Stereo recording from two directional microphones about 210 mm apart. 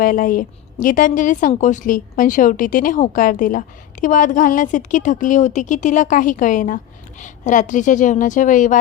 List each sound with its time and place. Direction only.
0.0 s a woman's voice: 40° left (ahead or behind)